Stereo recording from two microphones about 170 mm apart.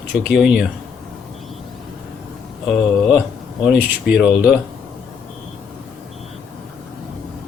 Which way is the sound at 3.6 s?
5° right (ahead or behind).